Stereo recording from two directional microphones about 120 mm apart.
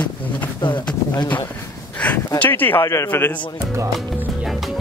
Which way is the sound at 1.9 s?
10° left (ahead or behind).